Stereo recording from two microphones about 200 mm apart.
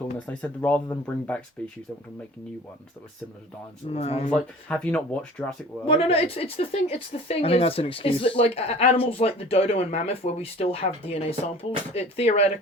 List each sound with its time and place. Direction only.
0.2 s speech: 5° left (ahead or behind)
3.8 s speech: 30° left (ahead or behind)
4.3 s speech: 5° left (ahead or behind)
5.8 s speech: 30° left (ahead or behind)